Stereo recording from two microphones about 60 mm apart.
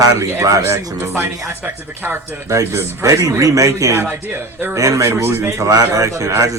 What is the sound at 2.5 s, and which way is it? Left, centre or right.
A man's voice, right.